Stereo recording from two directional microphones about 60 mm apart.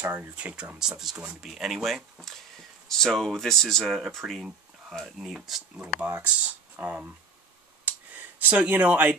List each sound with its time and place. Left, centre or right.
0.0 s speech: right
0.7 s speech: centre
5.2 s speech: centre; by 7.1 s right
7.8 s a sound: right